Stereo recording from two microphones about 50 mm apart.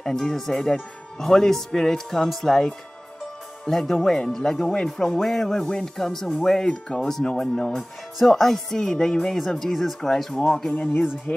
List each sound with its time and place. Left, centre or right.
0.0 s speech: centre
11.3 s speech: left